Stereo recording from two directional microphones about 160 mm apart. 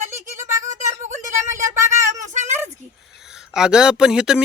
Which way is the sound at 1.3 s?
15° right (ahead or behind).